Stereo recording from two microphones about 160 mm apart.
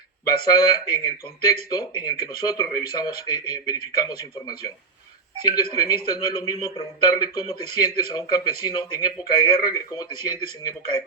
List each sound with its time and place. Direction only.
0.3 s speech: 25° left (ahead or behind)